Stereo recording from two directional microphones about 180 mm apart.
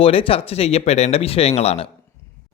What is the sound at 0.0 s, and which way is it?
A man's voice, 30° left (ahead or behind).